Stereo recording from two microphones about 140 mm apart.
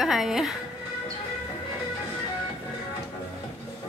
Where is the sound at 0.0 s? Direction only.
Centre (ahead or behind).